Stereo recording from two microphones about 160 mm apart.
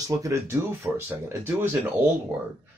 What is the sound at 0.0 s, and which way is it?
Speech, 20° right (ahead or behind).